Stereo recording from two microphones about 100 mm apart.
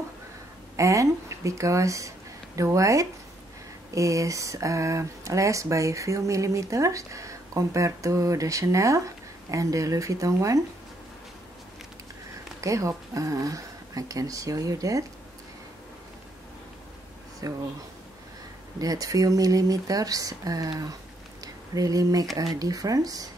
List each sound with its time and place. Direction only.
0.7 s speech: 30° right (ahead or behind)
12.5 s speech: 35° right (ahead or behind)
17.4 s speech: 35° right (ahead or behind)
18.8 s speech: 35° right (ahead or behind)
21.7 s speech: 40° right (ahead or behind)